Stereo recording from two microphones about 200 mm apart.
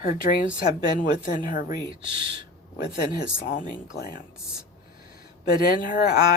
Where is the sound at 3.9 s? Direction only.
45° left (ahead or behind).